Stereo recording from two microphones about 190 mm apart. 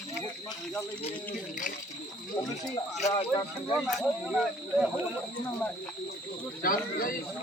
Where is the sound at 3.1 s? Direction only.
25° left (ahead or behind).